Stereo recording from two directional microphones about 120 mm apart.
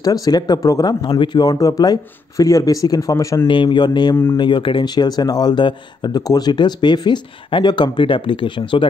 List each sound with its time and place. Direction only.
0.0 s speech: 30° left (ahead or behind)
3.4 s speech: 40° left (ahead or behind)